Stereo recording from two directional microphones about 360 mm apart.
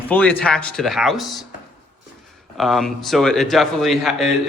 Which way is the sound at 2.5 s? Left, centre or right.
Centre.